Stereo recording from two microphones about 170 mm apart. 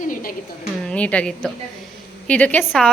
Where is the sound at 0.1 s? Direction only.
55° left (ahead or behind).